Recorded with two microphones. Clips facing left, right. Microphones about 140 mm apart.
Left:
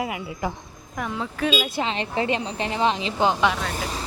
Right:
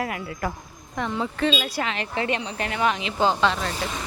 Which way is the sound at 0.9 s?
5° left (ahead or behind).